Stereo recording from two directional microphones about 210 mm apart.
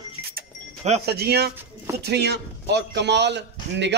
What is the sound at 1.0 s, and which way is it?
A man's voice, 50° right (ahead or behind).